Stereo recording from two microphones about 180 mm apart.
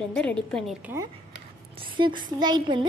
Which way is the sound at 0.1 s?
5° left (ahead or behind).